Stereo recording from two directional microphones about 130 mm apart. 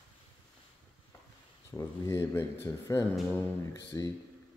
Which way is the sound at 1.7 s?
20° left (ahead or behind).